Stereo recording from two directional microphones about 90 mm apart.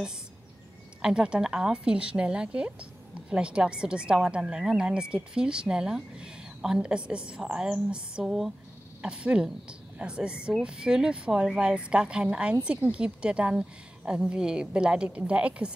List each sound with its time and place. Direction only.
1.0 s speech: 10° right (ahead or behind)